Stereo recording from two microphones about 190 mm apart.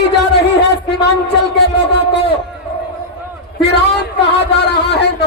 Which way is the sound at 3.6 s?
60° left (ahead or behind).